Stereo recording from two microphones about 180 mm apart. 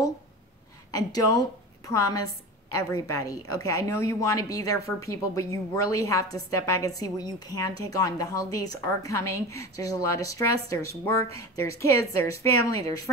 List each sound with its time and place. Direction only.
0.9 s a woman's voice: 20° left (ahead or behind)